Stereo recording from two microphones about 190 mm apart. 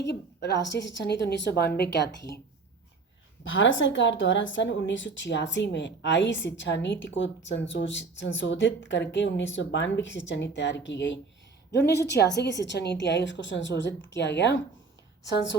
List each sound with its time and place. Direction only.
0.4 s a woman's voice: 65° left (ahead or behind)
3.5 s a woman's voice: 75° left (ahead or behind)